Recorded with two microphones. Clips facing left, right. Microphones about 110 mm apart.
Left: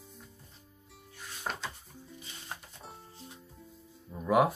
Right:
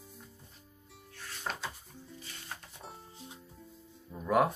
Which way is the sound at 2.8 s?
Centre (ahead or behind).